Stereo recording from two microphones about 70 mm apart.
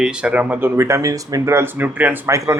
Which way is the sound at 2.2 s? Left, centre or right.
Right.